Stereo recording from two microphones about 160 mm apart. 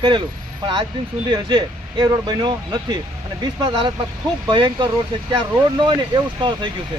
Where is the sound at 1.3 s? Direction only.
30° right (ahead or behind).